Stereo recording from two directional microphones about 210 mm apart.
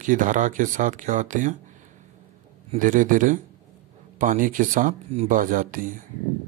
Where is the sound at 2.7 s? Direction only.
40° right (ahead or behind).